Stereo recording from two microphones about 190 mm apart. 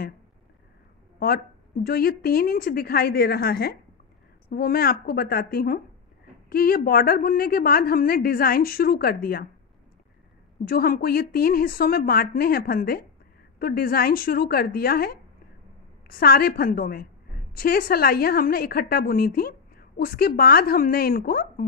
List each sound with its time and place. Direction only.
1.2 s a woman's voice: 50° left (ahead or behind)
10.6 s a woman's voice: 50° left (ahead or behind)